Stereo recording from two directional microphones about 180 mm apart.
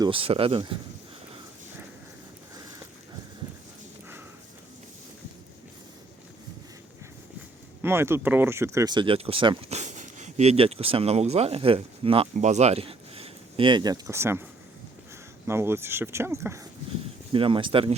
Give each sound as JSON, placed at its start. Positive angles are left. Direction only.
{"t": 0.0, "sound": "speech", "side_deg": -30}
{"t": 7.8, "sound": "speech", "side_deg": -15}
{"t": 15.4, "sound": "speech", "side_deg": -15}
{"t": 17.3, "sound": "speech", "side_deg": -30}